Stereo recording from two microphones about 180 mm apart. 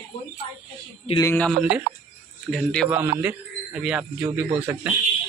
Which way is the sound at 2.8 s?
10° right (ahead or behind).